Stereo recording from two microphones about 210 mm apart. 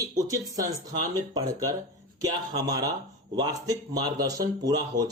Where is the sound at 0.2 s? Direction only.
15° right (ahead or behind).